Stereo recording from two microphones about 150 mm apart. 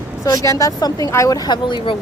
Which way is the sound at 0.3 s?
20° left (ahead or behind).